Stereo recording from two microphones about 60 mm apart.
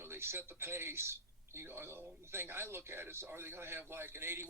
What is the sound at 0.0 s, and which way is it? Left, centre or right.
A man's voice, right.